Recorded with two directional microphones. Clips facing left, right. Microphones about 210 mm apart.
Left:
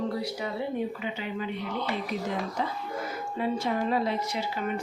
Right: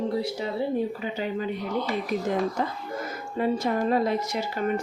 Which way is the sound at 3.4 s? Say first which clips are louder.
Right 4 dB; 45° right (ahead or behind).